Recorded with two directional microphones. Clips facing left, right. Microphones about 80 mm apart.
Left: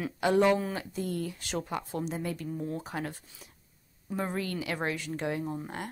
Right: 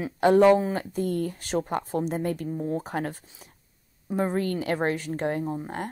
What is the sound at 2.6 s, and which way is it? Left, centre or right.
Speech, right.